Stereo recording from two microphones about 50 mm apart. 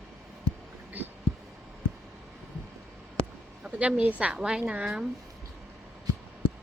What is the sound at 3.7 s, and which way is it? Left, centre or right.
Speech, right.